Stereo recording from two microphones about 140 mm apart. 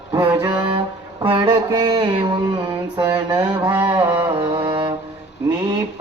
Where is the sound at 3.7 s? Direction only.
10° right (ahead or behind).